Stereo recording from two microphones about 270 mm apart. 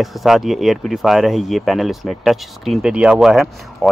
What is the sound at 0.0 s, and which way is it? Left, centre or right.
Speech, centre.